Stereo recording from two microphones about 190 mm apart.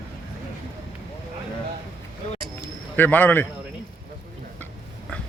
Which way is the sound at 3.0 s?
10° left (ahead or behind).